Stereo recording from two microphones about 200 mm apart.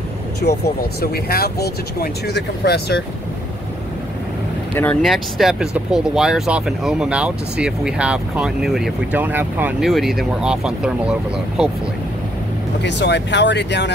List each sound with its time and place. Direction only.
0.4 s speech: 45° left (ahead or behind)
4.7 s speech: 5° left (ahead or behind)
12.8 s speech: 60° left (ahead or behind)